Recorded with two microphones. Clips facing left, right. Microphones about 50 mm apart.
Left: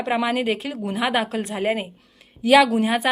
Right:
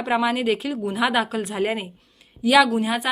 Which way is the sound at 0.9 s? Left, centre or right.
Centre.